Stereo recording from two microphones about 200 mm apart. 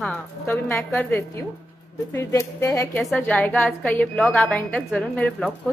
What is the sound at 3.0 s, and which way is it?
A woman's voice, centre (ahead or behind).